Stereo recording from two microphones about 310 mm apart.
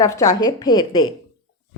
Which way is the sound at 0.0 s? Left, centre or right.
Centre.